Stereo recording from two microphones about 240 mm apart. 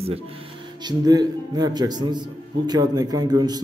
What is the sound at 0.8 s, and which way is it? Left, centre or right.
A man's voice, centre.